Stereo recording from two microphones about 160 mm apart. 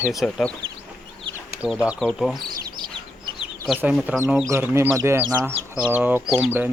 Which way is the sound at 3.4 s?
5° right (ahead or behind).